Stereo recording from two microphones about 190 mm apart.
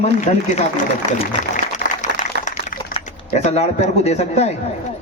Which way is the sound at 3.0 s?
40° left (ahead or behind).